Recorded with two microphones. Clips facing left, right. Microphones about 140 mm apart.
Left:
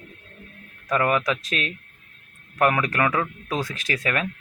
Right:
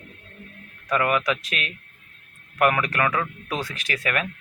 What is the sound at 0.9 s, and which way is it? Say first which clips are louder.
Speech: left 1 dB; 30° left (ahead or behind).